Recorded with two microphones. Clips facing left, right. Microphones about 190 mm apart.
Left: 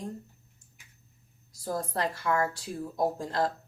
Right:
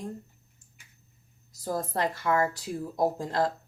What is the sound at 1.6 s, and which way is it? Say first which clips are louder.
Speech: right 2 dB; 20° right (ahead or behind).